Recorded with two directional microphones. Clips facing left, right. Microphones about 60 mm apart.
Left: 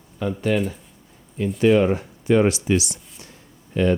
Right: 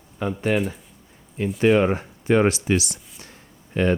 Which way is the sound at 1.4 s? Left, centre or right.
Right.